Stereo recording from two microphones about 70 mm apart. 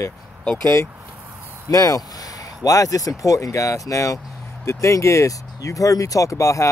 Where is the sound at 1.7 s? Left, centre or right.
Left.